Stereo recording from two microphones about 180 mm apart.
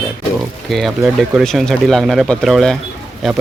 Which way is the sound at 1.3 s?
Centre (ahead or behind).